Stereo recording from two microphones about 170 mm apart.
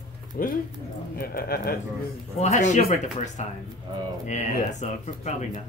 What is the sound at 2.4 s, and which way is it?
Speech, 45° left (ahead or behind).